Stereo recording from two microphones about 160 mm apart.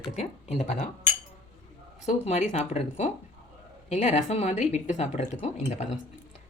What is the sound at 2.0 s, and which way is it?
Speech, 45° left (ahead or behind).